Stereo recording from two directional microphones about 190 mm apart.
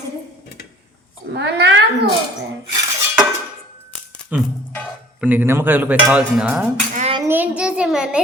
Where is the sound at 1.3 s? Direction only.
65° right (ahead or behind).